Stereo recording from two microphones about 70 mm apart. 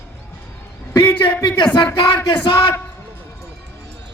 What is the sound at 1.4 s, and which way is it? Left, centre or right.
Speech, left.